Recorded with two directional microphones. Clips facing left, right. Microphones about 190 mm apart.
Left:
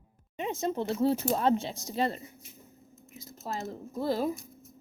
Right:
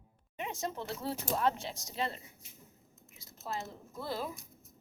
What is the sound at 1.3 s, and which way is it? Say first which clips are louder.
Speech: left 5 dB; 25° left (ahead or behind).